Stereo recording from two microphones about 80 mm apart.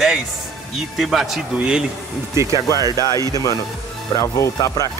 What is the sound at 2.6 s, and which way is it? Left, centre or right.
Speech, left.